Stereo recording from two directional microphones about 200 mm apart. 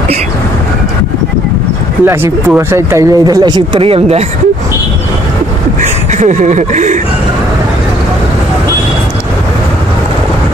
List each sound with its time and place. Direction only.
2.0 s speech: 10° right (ahead or behind); by 4.2 s 30° right (ahead or behind)
5.8 s speech: 35° right (ahead or behind)